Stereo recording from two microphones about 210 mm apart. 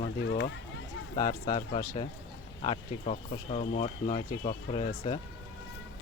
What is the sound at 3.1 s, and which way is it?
Speech, 35° left (ahead or behind).